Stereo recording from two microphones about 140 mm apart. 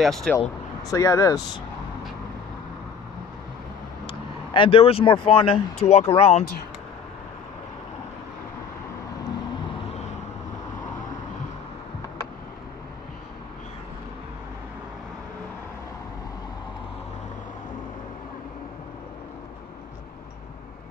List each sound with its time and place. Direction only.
0.0 s speech: 5° left (ahead or behind)
0.4 s speech: 25° left (ahead or behind)
4.1 s speech: 40° left (ahead or behind)